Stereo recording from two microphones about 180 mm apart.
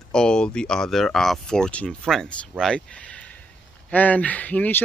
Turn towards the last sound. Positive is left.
turn(degrees=10)  # may be behind; listen again after turning